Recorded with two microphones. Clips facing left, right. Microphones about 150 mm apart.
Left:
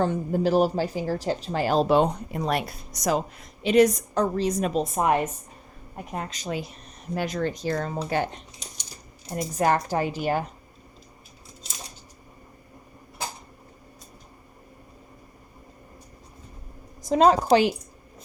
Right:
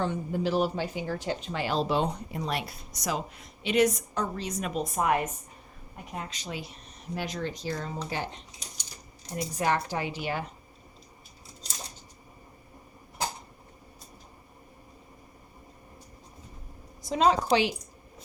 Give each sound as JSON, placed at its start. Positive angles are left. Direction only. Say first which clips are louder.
{"t": 0.0, "sound": "speech", "louder": "left 5 dB", "side_deg": 45}
{"t": 6.1, "sound": "speech", "louder": "left 6 dB", "side_deg": 45}
{"t": 17.0, "sound": "speech", "louder": "left 5 dB", "side_deg": 45}